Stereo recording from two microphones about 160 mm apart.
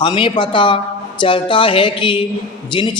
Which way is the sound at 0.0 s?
30° left (ahead or behind).